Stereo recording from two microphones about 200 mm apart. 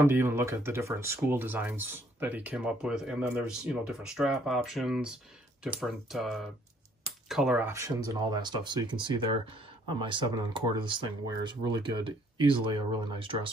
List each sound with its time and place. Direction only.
0.0 s speech: 10° right (ahead or behind)